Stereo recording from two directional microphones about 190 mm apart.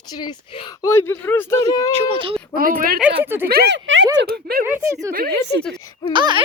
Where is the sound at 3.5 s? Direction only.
60° right (ahead or behind); by 4.0 s 75° right (ahead or behind).